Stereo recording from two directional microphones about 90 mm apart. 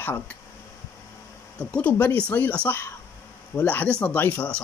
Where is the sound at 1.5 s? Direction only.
15° left (ahead or behind).